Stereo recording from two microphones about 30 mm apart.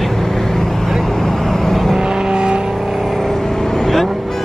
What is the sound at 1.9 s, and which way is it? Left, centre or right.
Vehicle, right.